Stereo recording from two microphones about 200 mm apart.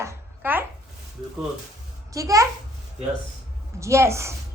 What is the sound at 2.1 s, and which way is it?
Speech, 15° right (ahead or behind).